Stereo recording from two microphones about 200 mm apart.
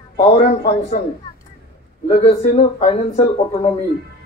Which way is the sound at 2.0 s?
30° left (ahead or behind).